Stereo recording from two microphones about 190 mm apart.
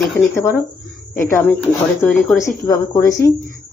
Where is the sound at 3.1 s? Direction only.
50° left (ahead or behind).